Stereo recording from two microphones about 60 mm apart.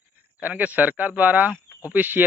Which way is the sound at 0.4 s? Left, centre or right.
Right.